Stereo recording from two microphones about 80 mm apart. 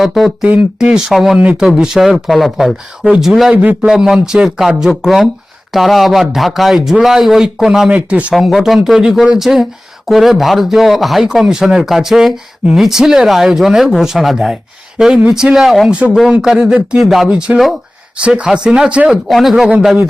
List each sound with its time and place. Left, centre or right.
0.0 s speech: centre
1.4 s speech: centre
3.5 s a man's voice: centre
3.8 s speech: centre
15.9 s speech: centre
19.3 s speech: centre